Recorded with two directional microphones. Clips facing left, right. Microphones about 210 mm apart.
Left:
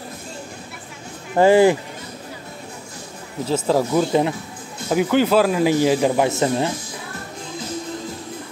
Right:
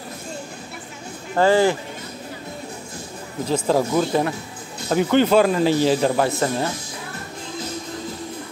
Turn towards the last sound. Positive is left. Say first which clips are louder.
# left 2 dB
turn(degrees=20)  # may be behind; listen again after turning